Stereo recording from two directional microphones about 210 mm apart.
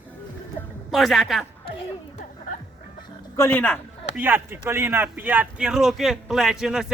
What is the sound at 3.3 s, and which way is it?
Speech, 10° left (ahead or behind).